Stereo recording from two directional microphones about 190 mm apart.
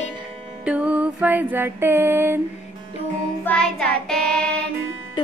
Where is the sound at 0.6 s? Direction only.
5° right (ahead or behind).